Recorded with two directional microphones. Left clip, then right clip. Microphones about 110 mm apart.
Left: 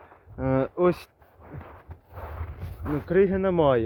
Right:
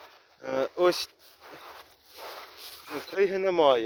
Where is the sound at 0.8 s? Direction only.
Centre (ahead or behind).